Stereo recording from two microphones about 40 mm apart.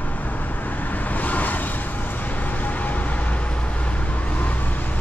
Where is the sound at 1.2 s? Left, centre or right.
Left.